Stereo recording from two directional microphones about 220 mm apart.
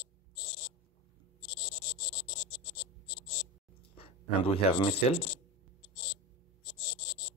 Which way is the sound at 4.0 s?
25° left (ahead or behind).